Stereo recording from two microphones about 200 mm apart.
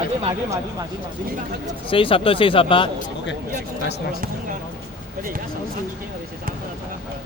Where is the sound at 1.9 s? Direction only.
25° left (ahead or behind).